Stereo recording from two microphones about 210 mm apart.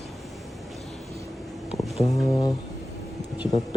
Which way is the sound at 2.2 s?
15° left (ahead or behind).